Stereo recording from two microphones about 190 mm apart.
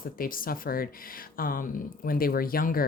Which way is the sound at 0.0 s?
50° left (ahead or behind).